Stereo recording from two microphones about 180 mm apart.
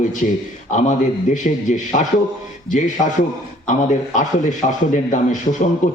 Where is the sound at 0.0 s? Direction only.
45° left (ahead or behind).